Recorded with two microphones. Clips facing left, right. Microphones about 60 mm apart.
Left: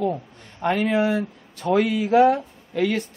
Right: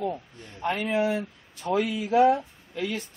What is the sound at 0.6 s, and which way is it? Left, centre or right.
Speech, left.